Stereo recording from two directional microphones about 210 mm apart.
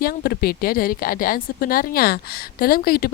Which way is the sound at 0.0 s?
45° left (ahead or behind).